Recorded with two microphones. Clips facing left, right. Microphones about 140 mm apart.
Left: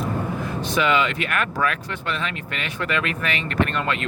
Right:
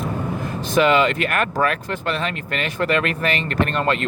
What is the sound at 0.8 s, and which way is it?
Speech, 40° right (ahead or behind).